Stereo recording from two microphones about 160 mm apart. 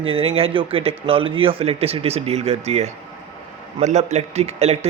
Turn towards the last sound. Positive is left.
turn(degrees=-40)  # may be behind; listen again after turning